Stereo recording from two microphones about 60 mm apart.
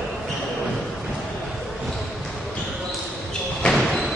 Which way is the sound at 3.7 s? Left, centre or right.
Centre.